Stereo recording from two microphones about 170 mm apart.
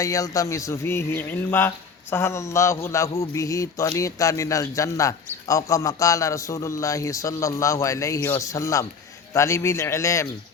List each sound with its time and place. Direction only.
0.0 s speech: 20° left (ahead or behind)